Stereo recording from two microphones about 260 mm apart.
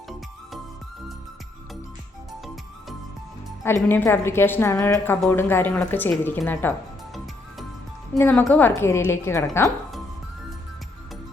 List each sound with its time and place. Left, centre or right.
3.6 s a woman's voice: centre